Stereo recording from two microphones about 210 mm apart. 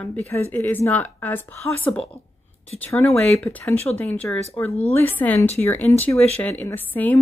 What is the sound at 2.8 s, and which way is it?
Speech, 10° left (ahead or behind).